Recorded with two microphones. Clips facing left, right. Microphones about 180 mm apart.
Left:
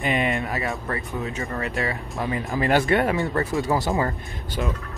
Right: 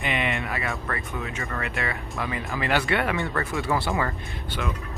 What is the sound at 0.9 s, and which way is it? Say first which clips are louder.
Speech: left 3 dB; 35° left (ahead or behind).